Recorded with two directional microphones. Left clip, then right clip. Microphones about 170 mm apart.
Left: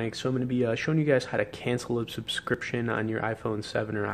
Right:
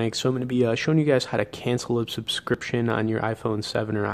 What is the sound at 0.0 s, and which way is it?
Speech, 30° right (ahead or behind).